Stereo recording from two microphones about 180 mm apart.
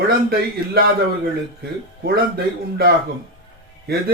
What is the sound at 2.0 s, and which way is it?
Speech, 60° right (ahead or behind).